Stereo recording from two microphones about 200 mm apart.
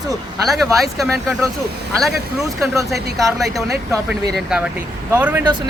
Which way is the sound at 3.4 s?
Centre (ahead or behind).